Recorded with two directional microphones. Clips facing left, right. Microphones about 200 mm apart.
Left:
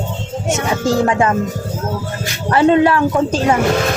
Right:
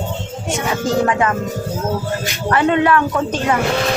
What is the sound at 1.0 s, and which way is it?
Speech, 25° left (ahead or behind).